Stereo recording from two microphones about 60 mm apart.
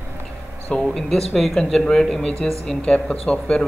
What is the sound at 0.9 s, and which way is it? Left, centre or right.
Speech, centre.